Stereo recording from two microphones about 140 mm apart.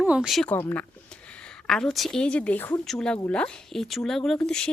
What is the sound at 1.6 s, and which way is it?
A woman's voice, 5° left (ahead or behind).